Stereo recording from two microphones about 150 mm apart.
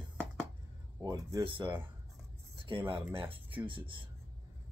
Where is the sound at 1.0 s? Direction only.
30° right (ahead or behind).